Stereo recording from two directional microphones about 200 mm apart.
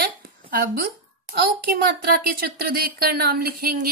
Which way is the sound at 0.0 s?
50° right (ahead or behind).